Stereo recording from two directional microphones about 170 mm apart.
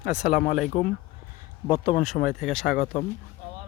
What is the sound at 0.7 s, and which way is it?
Speech, 45° left (ahead or behind).